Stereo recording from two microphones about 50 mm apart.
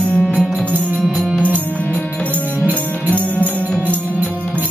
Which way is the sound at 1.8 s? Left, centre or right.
Left.